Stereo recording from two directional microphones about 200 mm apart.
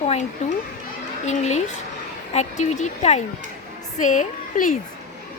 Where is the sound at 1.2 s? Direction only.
35° left (ahead or behind).